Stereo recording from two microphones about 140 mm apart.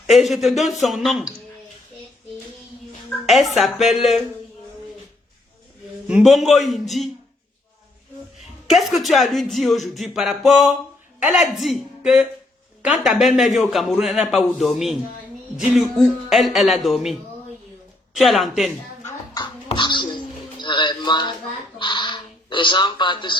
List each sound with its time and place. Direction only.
0.1 s speech: centre (ahead or behind)
3.2 s speech: centre (ahead or behind)
6.1 s speech: 5° right (ahead or behind)
8.7 s speech: centre (ahead or behind)
19.6 s music: 35° left (ahead or behind)
21.8 s speech: 35° left (ahead or behind)